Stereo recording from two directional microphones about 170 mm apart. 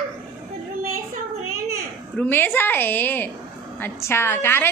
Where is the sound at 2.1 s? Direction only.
10° left (ahead or behind).